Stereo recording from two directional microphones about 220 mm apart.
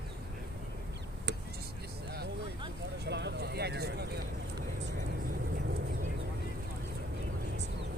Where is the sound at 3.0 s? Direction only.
50° right (ahead or behind).